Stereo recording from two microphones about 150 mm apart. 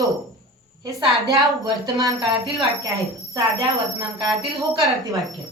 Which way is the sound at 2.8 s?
20° right (ahead or behind).